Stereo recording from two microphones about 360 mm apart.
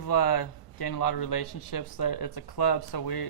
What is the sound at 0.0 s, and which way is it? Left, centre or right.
Speech, left.